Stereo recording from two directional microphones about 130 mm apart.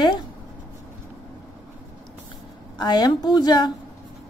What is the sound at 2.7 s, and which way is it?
Speech, 35° left (ahead or behind).